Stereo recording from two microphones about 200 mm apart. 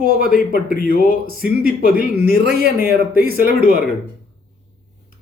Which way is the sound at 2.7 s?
45° left (ahead or behind).